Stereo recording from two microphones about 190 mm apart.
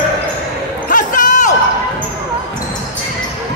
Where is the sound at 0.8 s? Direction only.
45° left (ahead or behind).